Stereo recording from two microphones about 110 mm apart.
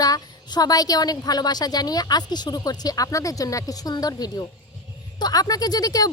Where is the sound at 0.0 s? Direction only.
35° left (ahead or behind).